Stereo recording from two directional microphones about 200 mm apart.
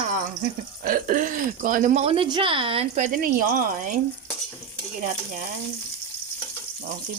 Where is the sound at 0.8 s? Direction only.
45° right (ahead or behind).